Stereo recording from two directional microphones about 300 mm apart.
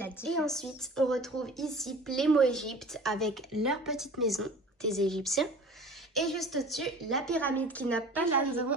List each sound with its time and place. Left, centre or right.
0.0 s a woman's voice: centre